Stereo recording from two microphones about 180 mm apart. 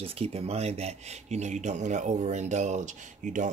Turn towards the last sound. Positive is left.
turn(degrees=-45)  # may be behind; listen again after turning